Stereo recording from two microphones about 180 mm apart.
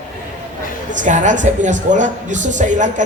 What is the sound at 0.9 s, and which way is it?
A man's voice, 45° right (ahead or behind).